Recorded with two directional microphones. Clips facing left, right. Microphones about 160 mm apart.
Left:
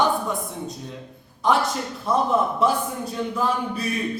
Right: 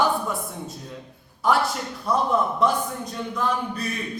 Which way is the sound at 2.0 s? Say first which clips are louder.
Left 1 dB; centre (ahead or behind).